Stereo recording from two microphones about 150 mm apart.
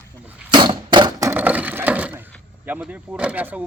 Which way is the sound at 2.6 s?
10° right (ahead or behind).